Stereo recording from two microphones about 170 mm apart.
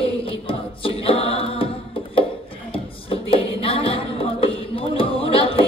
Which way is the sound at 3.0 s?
35° left (ahead or behind).